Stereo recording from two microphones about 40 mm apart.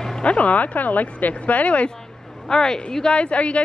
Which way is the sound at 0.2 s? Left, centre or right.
Left.